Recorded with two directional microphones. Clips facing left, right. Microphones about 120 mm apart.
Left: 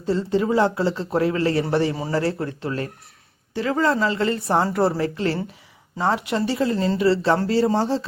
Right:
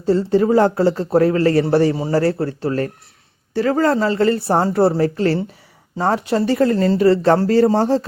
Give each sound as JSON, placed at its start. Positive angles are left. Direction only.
{"t": 0.0, "sound": "a woman's voice", "side_deg": -40}